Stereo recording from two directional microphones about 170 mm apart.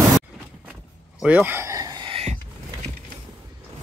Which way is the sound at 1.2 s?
10° right (ahead or behind).